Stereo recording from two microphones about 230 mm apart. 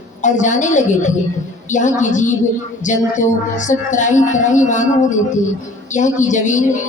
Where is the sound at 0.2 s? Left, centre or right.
Left.